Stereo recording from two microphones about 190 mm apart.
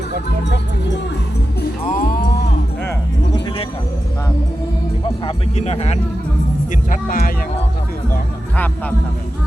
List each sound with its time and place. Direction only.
0.4 s speech: 65° left (ahead or behind)
1.9 s music: 45° left (ahead or behind)
3.3 s a sound: 25° left (ahead or behind)
5.5 s speech: 35° left (ahead or behind)
6.7 s speech: 45° left (ahead or behind)
8.5 s speech: 10° left (ahead or behind)